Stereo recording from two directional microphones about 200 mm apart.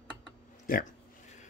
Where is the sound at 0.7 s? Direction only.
45° left (ahead or behind).